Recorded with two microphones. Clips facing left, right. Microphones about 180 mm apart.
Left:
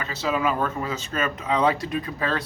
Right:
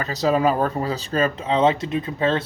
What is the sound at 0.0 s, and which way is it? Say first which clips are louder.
A man's voice: right 6 dB; 40° right (ahead or behind).